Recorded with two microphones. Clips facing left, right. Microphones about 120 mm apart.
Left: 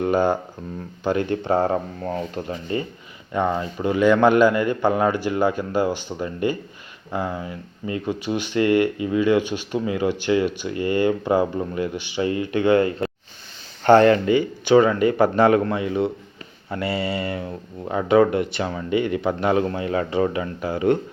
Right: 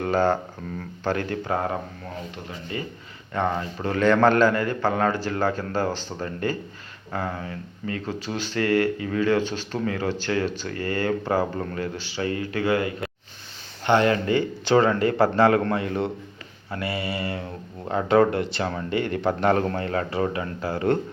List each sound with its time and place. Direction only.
0.0 s speech: 15° left (ahead or behind); by 2.7 s 40° left (ahead or behind)
3.3 s speech: 15° left (ahead or behind)
13.8 s speech: 40° left (ahead or behind)
14.3 s speech: 15° left (ahead or behind)
16.7 s speech: 25° left (ahead or behind)
17.8 s speech: 15° left (ahead or behind)